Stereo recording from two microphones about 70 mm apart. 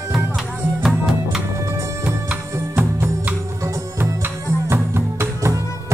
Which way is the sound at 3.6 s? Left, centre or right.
Right.